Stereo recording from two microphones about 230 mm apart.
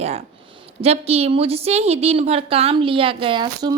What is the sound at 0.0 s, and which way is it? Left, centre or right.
A woman's voice, right.